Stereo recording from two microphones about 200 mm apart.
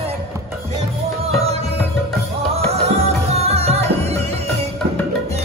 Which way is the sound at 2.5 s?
30° right (ahead or behind).